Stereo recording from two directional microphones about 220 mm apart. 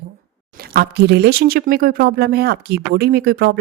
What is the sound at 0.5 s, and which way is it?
Speech, 45° right (ahead or behind).